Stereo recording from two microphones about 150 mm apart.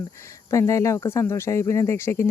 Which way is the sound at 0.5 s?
20° left (ahead or behind).